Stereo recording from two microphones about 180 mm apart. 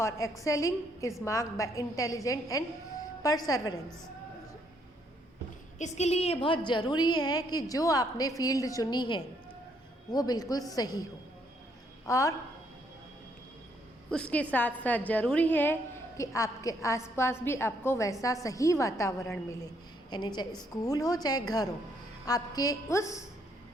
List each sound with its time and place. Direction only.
0.0 s a woman's voice: 15° left (ahead or behind)
5.8 s a woman's voice: 35° left (ahead or behind); by 11.0 s 20° left (ahead or behind)
12.0 s a woman's voice: 15° left (ahead or behind)
14.1 s a woman's voice: 5° left (ahead or behind)